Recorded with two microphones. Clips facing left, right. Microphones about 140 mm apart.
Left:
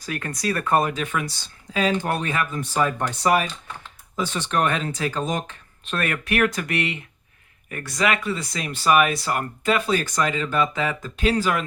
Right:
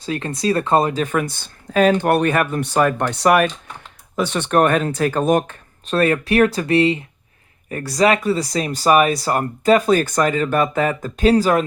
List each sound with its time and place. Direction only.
0.0 s speech: 25° right (ahead or behind); by 5.5 s 55° right (ahead or behind)
5.8 s speech: 35° right (ahead or behind)